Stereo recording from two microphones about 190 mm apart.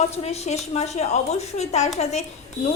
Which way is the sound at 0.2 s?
35° left (ahead or behind).